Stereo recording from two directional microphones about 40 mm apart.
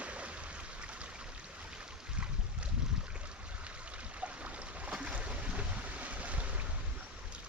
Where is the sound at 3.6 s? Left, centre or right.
Right.